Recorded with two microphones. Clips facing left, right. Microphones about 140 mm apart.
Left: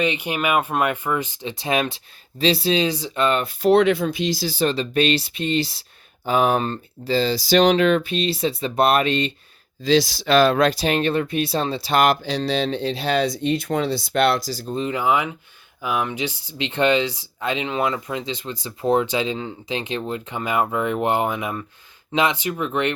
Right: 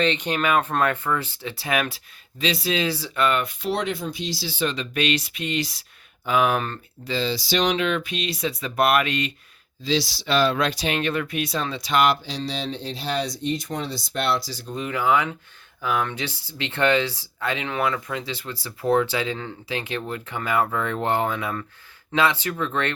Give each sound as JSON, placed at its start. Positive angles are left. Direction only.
{"t": 0.0, "sound": "speech", "side_deg": 10}
{"t": 3.7, "sound": "speech", "side_deg": 65}
{"t": 4.4, "sound": "speech", "side_deg": 40}
{"t": 9.8, "sound": "speech", "side_deg": 45}
{"t": 10.2, "sound": "speech", "side_deg": 90}
{"t": 10.5, "sound": "speech", "side_deg": 40}
{"t": 12.4, "sound": "speech", "side_deg": 65}
{"t": 14.7, "sound": "speech", "side_deg": 25}